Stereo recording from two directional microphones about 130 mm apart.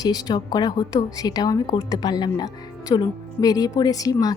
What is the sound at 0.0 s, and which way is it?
A woman's voice, 30° left (ahead or behind).